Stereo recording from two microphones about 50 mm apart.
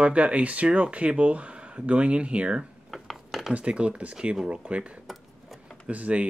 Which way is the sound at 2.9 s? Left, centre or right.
Centre.